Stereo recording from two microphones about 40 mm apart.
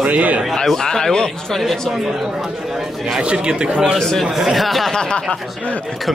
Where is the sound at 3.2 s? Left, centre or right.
Right.